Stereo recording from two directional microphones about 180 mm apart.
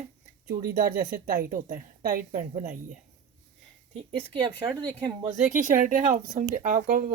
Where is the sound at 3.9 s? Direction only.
25° right (ahead or behind).